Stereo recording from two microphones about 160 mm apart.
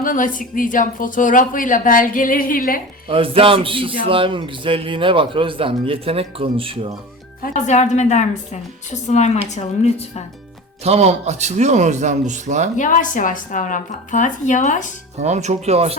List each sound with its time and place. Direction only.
0.0 s speech: 55° left (ahead or behind)
3.1 s a man's voice: 35° right (ahead or behind)
7.4 s a woman's voice: 45° left (ahead or behind)
10.8 s speech: 40° right (ahead or behind)
12.7 s a woman's voice: 55° left (ahead or behind)
15.2 s speech: 45° right (ahead or behind)